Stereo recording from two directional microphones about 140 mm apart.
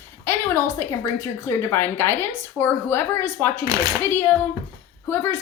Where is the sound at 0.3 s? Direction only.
20° left (ahead or behind).